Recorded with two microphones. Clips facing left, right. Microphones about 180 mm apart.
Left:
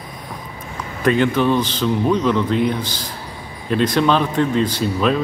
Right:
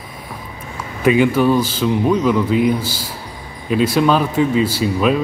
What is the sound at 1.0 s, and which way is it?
Speech, 10° right (ahead or behind).